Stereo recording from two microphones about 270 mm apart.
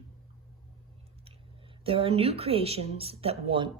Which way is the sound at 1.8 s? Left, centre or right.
Right.